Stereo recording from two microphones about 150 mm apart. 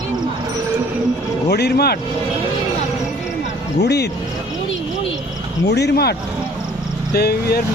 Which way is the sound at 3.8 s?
90° left.